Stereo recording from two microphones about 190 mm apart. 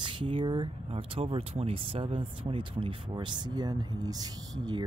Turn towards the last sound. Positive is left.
turn(degrees=-25)  # may be behind; listen again after turning